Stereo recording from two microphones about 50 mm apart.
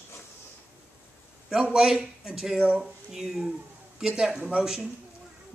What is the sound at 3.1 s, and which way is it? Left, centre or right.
Speech, centre.